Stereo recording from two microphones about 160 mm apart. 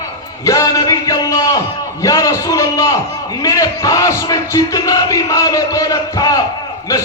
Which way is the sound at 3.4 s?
20° left (ahead or behind).